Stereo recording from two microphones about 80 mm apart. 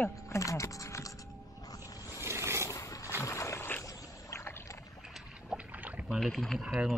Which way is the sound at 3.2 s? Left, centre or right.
Left.